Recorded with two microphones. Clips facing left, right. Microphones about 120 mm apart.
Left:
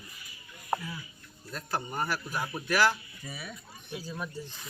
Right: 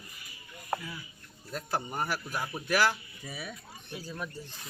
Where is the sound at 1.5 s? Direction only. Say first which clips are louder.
Right 1 dB; 15° right (ahead or behind).